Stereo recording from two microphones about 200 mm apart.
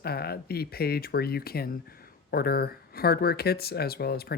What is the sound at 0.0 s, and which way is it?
Speech, 50° left (ahead or behind).